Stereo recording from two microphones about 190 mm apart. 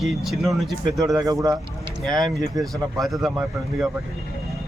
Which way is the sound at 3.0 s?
Centre (ahead or behind).